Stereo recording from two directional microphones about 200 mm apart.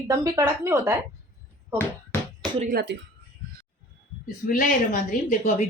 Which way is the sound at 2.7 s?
50° right (ahead or behind).